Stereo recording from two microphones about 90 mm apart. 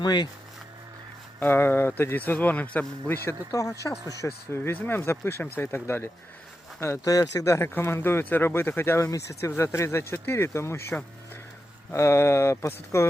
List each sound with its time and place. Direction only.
0.0 s speech: 55° left (ahead or behind)
1.4 s speech: 25° left (ahead or behind)
3.5 s speech: 40° left (ahead or behind)
4.2 s speech: 30° left (ahead or behind)
7.0 s speech: 40° left (ahead or behind)
11.9 s speech: 30° left (ahead or behind)